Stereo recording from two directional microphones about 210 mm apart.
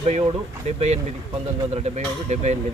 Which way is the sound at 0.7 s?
30° right (ahead or behind).